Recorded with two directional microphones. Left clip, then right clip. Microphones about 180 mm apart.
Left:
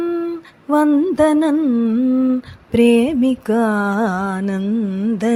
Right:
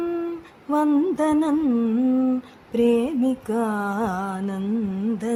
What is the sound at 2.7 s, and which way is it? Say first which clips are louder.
Music: left 6 dB; 30° left (ahead or behind).